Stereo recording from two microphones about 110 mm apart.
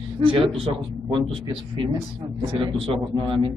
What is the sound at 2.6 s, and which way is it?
Speech, 50° right (ahead or behind).